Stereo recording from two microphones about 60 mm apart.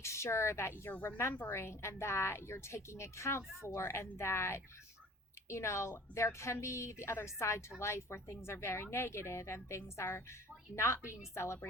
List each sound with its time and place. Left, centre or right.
0.0 s a woman's voice: left
0.9 s a woman's voice: left
1.5 s a woman's voice: left